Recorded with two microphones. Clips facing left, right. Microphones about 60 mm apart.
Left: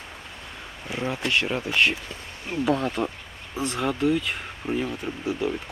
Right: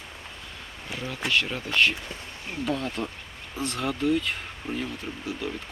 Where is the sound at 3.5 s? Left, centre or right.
Centre.